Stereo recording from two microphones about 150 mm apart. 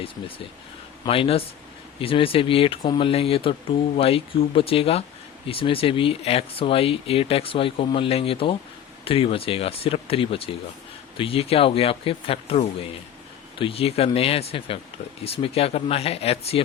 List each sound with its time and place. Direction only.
0.0 s speech: 40° left (ahead or behind)